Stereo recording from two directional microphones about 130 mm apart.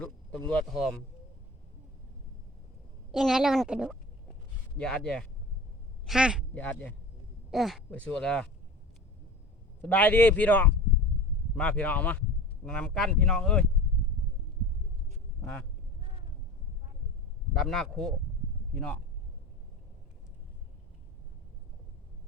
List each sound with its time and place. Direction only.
0.0 s speech: 10° left (ahead or behind)
3.1 s speech: centre (ahead or behind)
4.8 s speech: 5° left (ahead or behind)
6.1 s speech: 5° right (ahead or behind)
6.5 s speech: 10° left (ahead or behind)
7.5 s speech: centre (ahead or behind)
9.8 s speech: 10° left (ahead or behind)
15.4 s speech: 15° left (ahead or behind)
17.6 s speech: centre (ahead or behind)